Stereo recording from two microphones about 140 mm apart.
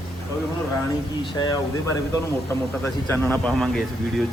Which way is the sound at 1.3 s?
30° left (ahead or behind).